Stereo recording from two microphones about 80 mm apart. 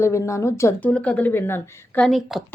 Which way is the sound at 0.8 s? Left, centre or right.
Centre.